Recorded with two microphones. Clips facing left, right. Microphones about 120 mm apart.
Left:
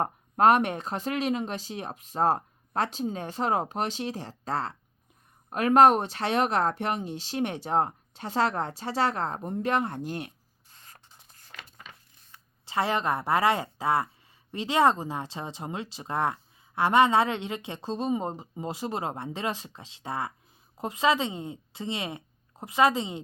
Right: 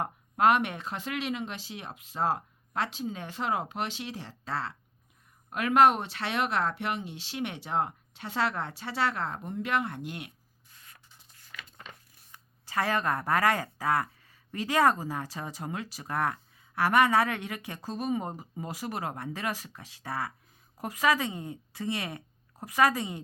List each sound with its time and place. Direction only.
0.0 s speech: 40° left (ahead or behind)
12.6 s speech: 20° left (ahead or behind)